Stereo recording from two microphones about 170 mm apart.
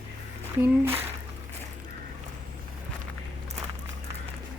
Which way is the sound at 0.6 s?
10° right (ahead or behind).